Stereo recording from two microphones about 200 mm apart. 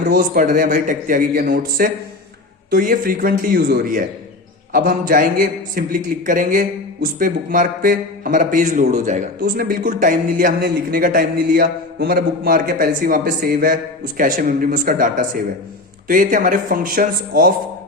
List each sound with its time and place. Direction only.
0.1 s a man's voice: 45° right (ahead or behind)